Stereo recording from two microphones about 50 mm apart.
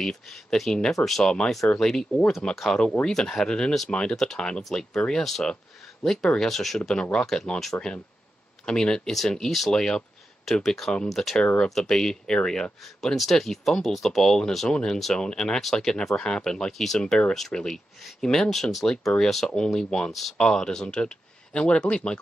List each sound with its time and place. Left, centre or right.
0.0 s speech: centre
2.8 s speech: left
3.1 s speech: centre
6.9 s speech: centre
8.6 s speech: centre
13.1 s speech: centre
20.3 s speech: centre